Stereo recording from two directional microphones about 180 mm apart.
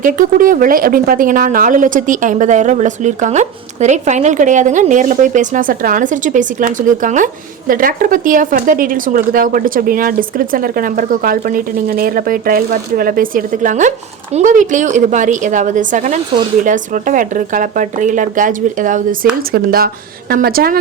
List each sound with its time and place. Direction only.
0.0 s speech: 50° right (ahead or behind)